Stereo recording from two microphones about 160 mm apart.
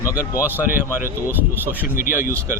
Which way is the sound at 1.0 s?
15° right (ahead or behind).